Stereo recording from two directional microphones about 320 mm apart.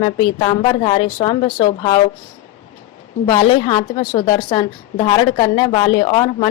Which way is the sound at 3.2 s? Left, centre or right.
Centre.